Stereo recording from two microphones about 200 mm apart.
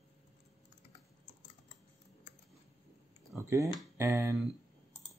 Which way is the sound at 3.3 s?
15° right (ahead or behind).